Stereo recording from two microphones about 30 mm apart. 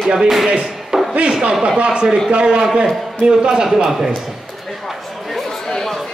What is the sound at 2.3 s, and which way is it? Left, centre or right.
Speech, right.